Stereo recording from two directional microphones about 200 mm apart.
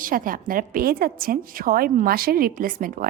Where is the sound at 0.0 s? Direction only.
45° right (ahead or behind).